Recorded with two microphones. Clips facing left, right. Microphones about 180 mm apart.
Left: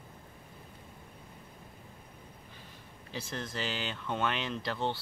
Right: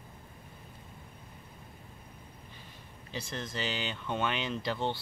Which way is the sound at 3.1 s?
5° left (ahead or behind).